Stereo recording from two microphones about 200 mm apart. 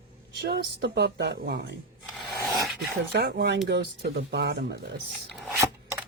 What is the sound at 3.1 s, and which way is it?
Speech, 55° right (ahead or behind).